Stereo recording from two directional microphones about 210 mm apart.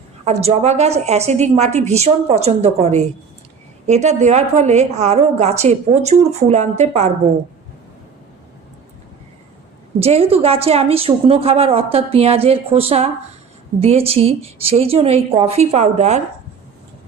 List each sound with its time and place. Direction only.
0.3 s a woman's voice: 30° right (ahead or behind)
10.0 s a woman's voice: 30° right (ahead or behind)